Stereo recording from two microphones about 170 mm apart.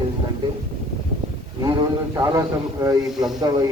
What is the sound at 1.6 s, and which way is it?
A man's voice, 20° right (ahead or behind).